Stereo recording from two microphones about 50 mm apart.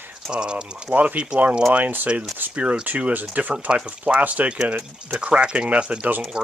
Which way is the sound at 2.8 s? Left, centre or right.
Right.